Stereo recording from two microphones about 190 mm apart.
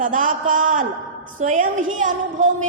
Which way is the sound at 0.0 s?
45° right (ahead or behind).